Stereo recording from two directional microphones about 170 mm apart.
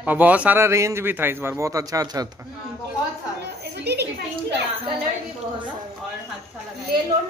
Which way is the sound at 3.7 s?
75° right (ahead or behind).